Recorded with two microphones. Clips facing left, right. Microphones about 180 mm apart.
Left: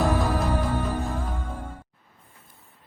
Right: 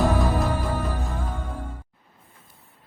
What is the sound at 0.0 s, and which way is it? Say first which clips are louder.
Music: right 1 dB; centre (ahead or behind).